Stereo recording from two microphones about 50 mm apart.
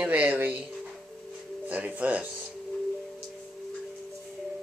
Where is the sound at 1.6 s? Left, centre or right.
Right.